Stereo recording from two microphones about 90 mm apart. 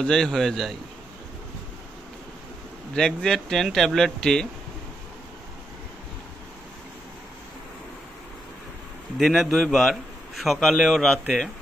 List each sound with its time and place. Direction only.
0.0 s a man's voice: 5° left (ahead or behind)
2.9 s a man's voice: 10° left (ahead or behind)
9.2 s a man's voice: centre (ahead or behind)